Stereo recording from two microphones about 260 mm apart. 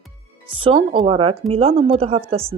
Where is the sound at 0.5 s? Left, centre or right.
Centre.